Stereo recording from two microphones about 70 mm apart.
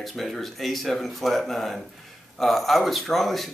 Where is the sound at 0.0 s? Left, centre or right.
Centre.